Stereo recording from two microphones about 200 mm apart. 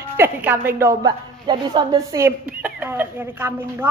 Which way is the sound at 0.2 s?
10° right (ahead or behind).